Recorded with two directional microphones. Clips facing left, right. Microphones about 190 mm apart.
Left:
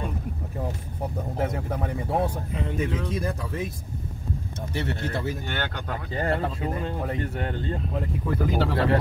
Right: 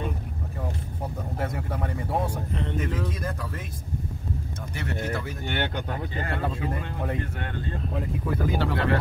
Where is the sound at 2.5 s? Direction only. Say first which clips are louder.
Left 1 dB; centre (ahead or behind).